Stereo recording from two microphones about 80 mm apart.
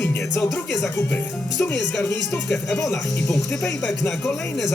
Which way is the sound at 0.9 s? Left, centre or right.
Left.